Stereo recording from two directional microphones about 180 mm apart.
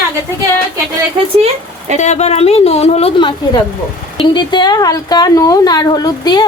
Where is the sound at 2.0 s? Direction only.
40° left (ahead or behind).